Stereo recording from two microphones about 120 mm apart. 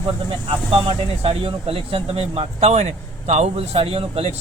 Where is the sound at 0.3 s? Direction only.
50° right (ahead or behind).